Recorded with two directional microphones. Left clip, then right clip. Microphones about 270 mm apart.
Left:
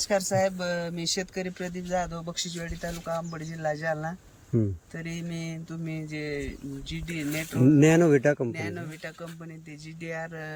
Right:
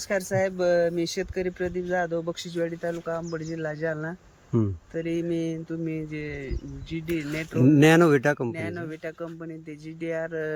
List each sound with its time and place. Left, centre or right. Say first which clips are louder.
0.0 s speech: left 1 dB; centre